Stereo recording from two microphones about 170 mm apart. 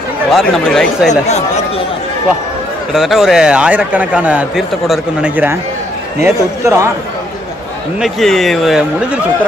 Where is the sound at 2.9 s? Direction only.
Centre (ahead or behind).